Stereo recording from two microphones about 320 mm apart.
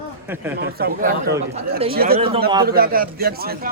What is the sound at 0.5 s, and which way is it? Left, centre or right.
A man's voice, right.